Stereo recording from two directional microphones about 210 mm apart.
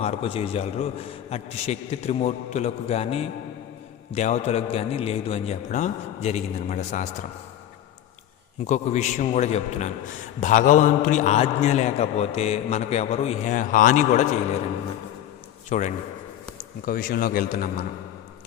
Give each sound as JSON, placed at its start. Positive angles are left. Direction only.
{"t": 0.0, "sound": "a man's voice", "side_deg": 30}
{"t": 8.6, "sound": "a man's voice", "side_deg": 35}
{"t": 15.7, "sound": "a man's voice", "side_deg": 35}